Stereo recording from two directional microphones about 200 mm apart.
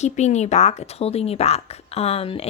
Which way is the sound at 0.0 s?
35° left (ahead or behind).